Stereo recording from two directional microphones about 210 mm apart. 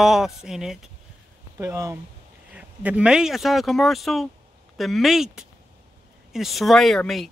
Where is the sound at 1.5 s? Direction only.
15° right (ahead or behind).